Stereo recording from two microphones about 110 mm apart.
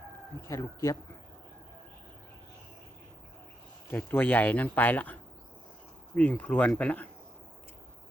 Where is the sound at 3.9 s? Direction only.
15° left (ahead or behind).